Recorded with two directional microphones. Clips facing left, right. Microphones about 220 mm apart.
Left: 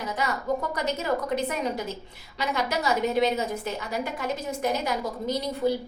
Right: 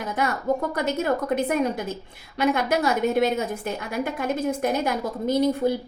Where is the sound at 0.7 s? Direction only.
55° right (ahead or behind).